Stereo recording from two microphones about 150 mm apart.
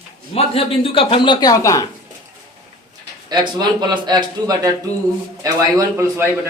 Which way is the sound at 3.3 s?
30° right (ahead or behind).